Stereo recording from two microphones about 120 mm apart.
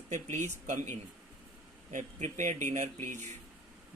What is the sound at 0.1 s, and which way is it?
Speech, 75° right (ahead or behind).